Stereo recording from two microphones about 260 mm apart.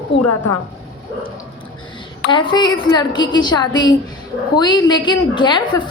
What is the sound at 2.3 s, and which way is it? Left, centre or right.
A woman's voice, centre.